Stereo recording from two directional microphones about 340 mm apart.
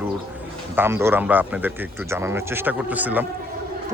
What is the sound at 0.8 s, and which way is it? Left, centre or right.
A man's voice, centre.